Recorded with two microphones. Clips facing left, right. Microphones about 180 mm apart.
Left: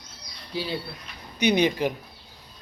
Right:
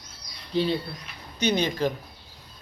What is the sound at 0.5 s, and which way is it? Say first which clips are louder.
Speech: right 6 dB; 5° left (ahead or behind).